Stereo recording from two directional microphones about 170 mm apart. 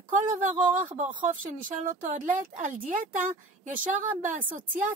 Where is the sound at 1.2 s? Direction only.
50° right (ahead or behind).